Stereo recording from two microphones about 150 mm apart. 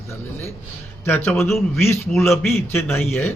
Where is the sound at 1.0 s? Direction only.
15° left (ahead or behind).